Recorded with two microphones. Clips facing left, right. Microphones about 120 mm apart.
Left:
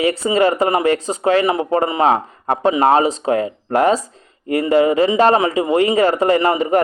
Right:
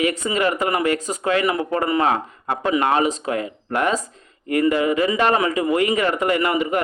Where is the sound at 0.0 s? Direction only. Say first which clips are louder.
Left 5 dB; 30° left (ahead or behind).